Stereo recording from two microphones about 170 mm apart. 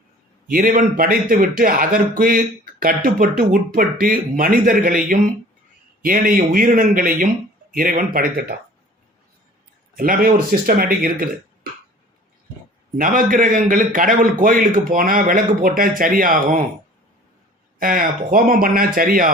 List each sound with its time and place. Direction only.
0.4 s speech: 55° right (ahead or behind)
9.9 s speech: 55° right (ahead or behind)
13.0 s a man's voice: 55° right (ahead or behind)
17.7 s speech: 55° right (ahead or behind)